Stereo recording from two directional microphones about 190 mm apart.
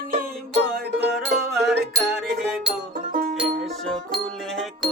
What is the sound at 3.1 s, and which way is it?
Music, 45° right (ahead or behind).